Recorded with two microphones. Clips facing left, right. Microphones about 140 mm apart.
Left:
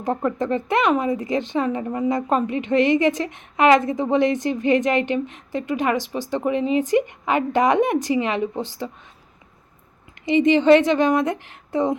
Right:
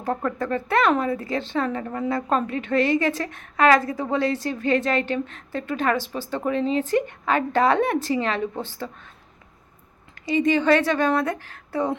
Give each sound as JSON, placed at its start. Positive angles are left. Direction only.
{"t": 0.0, "sound": "speech", "side_deg": 20}
{"t": 10.2, "sound": "a woman's voice", "side_deg": 20}